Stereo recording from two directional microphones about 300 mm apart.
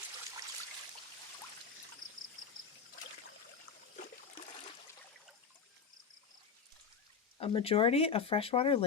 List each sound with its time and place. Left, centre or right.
7.3 s speech: centre